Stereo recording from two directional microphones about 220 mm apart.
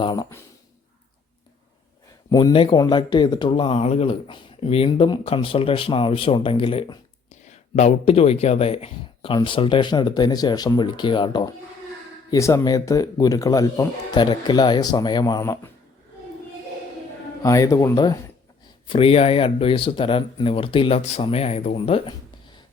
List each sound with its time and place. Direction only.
0.0 s speech: 20° left (ahead or behind)
2.3 s speech: 20° left (ahead or behind)
17.4 s speech: 15° left (ahead or behind)